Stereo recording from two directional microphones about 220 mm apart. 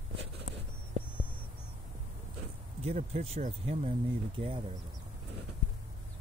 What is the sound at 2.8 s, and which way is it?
Speech, 30° right (ahead or behind).